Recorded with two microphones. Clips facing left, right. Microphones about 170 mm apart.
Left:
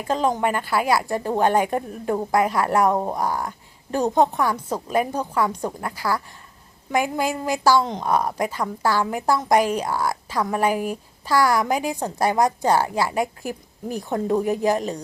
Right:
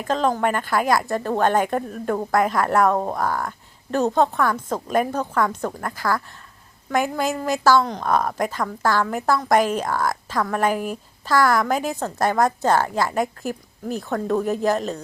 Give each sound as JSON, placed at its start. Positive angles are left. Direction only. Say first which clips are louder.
{"t": 0.1, "sound": "a woman's voice", "louder": "right 1 dB", "side_deg": 15}